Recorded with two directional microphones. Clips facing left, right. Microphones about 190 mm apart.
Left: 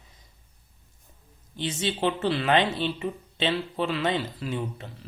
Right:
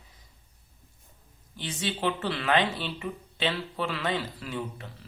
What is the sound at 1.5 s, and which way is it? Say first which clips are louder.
Speech: left 4 dB; 25° left (ahead or behind).